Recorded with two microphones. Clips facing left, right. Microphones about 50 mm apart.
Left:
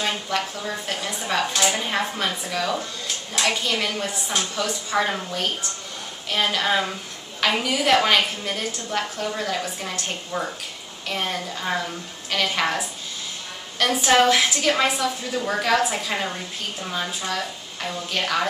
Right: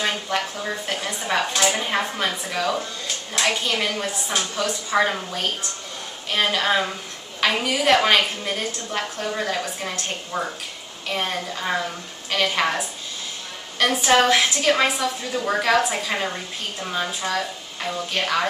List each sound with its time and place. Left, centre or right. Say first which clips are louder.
0.3 s a woman's voice: right 1 dB; centre
4.9 s a woman's voice: right 3 dB; right
6.3 s a woman's voice: right 1 dB; centre
13.7 s a woman's voice: even; centre